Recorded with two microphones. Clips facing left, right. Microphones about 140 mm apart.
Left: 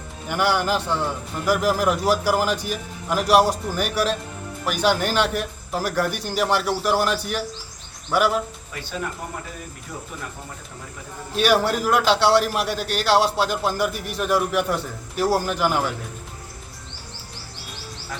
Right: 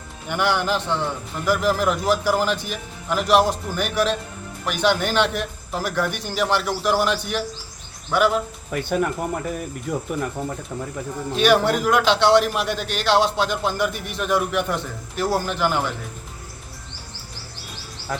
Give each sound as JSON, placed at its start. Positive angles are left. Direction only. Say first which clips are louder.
{"t": 0.3, "sound": "a man's voice", "louder": "even", "side_deg": 5}
{"t": 8.7, "sound": "speech", "louder": "right 9 dB", "side_deg": -55}
{"t": 11.3, "sound": "a man's voice", "louder": "right 2 dB", "side_deg": 5}
{"t": 18.1, "sound": "a sound", "louder": "right 7 dB", "side_deg": -50}